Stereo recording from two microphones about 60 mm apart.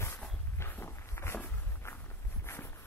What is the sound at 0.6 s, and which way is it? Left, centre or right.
Walk, left.